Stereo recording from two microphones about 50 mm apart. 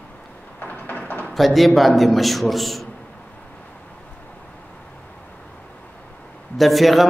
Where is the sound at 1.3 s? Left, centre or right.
Centre.